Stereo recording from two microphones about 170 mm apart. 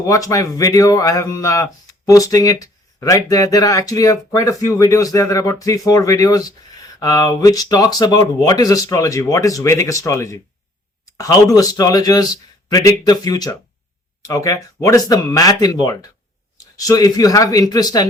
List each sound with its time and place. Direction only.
0.0 s speech: 20° left (ahead or behind)